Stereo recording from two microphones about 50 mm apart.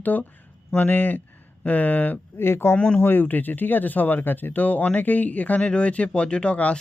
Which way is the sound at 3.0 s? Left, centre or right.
Left.